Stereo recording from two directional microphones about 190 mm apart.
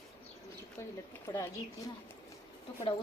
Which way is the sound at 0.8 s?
15° left (ahead or behind).